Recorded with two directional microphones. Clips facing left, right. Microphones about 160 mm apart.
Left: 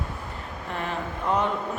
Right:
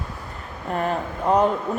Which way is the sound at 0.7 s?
40° right (ahead or behind).